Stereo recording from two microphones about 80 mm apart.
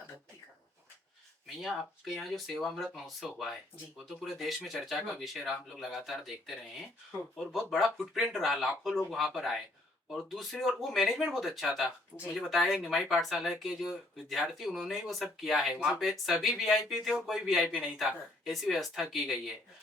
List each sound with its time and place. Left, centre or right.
1.6 s speech: centre